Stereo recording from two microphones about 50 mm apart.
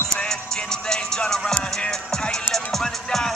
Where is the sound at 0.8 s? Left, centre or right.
Centre.